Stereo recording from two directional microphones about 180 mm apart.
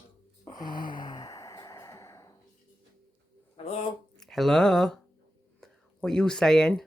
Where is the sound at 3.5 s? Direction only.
35° left (ahead or behind).